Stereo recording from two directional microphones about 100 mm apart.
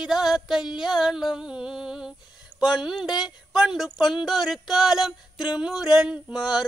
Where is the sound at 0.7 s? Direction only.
5° right (ahead or behind).